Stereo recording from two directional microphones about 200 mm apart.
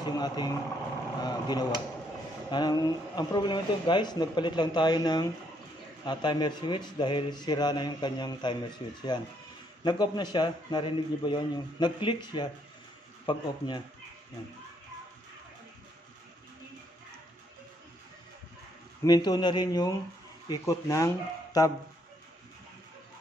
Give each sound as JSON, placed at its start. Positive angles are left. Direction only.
{"t": 0.0, "sound": "speech", "side_deg": 20}
{"t": 1.2, "sound": "a sound", "side_deg": 20}
{"t": 2.5, "sound": "a man's voice", "side_deg": 20}
{"t": 19.0, "sound": "a man's voice", "side_deg": 20}